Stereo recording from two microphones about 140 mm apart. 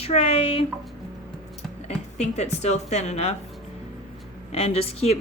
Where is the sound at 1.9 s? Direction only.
50° left (ahead or behind).